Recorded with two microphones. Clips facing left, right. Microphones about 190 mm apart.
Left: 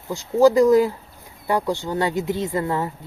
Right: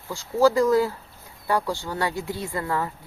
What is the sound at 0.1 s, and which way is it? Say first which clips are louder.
Speech: left 4 dB; 20° left (ahead or behind).